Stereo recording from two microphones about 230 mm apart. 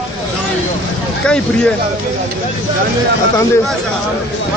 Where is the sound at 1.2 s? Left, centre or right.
Centre.